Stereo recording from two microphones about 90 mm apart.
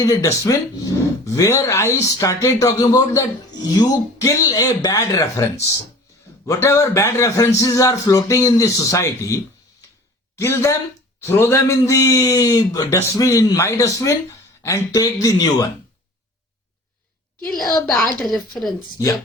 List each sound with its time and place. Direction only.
0.0 s a man's voice: 40° left (ahead or behind)
4.2 s a man's voice: 35° left (ahead or behind)
17.8 s a woman's voice: centre (ahead or behind)